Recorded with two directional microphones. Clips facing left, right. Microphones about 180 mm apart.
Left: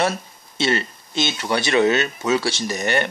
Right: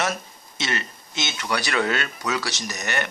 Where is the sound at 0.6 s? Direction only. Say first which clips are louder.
Left 8 dB; 30° left (ahead or behind).